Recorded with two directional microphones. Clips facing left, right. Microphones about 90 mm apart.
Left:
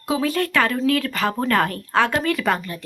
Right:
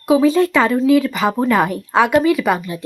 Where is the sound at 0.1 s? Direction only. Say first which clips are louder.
Right 8 dB; 15° right (ahead or behind).